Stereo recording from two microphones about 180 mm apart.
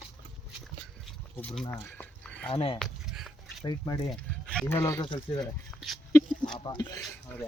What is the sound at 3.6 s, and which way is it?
Speech, 25° left (ahead or behind).